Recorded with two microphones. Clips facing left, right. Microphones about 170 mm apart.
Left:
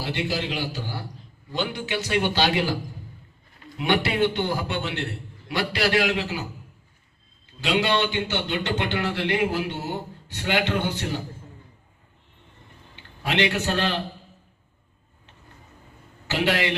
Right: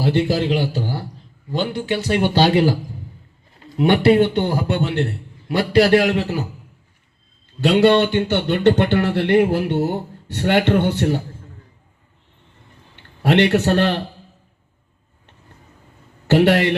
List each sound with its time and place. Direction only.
0.0 s a man's voice: 50° right (ahead or behind)
3.8 s a man's voice: 50° right (ahead or behind)
7.6 s speech: 55° right (ahead or behind)
13.2 s a man's voice: 60° right (ahead or behind)
16.2 s a man's voice: 55° right (ahead or behind)